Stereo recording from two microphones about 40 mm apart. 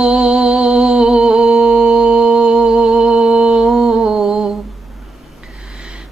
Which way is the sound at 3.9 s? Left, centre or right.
Centre.